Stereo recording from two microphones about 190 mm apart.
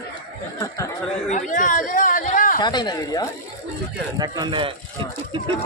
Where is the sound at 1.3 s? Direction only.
40° left (ahead or behind).